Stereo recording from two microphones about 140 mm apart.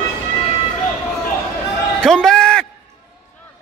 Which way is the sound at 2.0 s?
5° left (ahead or behind).